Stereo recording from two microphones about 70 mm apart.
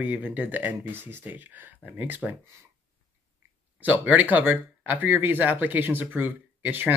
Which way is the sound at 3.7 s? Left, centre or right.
Right.